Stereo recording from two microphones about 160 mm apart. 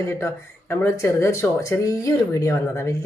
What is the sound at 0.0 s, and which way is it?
Speech, 15° left (ahead or behind).